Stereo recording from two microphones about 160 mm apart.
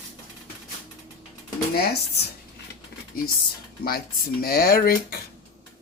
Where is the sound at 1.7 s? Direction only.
75° left (ahead or behind).